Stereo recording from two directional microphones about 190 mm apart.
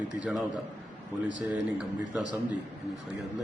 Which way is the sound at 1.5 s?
5° right (ahead or behind).